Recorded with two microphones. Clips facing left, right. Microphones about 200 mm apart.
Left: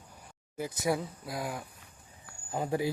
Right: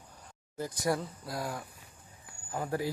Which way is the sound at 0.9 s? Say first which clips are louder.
Left 1 dB; centre (ahead or behind).